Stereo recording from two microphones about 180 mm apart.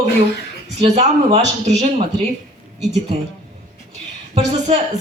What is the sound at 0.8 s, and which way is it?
A man's voice, 35° right (ahead or behind).